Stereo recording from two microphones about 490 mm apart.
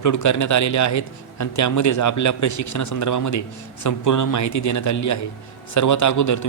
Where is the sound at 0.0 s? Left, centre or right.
Left.